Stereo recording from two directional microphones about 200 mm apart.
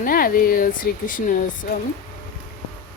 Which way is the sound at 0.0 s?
45° left (ahead or behind).